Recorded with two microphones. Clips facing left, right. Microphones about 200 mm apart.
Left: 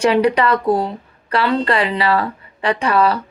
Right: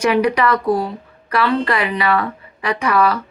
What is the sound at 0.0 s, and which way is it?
A man's voice, 30° left (ahead or behind).